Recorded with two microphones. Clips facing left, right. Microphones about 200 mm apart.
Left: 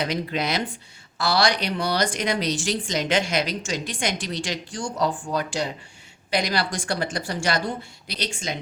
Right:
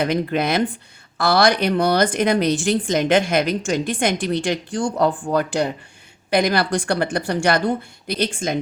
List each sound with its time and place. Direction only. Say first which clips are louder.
0.0 s speech: right 6 dB; 55° right (ahead or behind)